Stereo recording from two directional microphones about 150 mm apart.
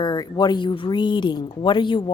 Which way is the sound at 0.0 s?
30° left (ahead or behind).